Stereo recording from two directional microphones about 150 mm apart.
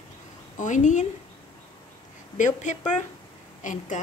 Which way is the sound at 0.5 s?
55° left (ahead or behind).